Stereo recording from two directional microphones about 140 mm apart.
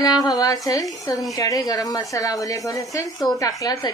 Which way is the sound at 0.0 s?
30° left (ahead or behind).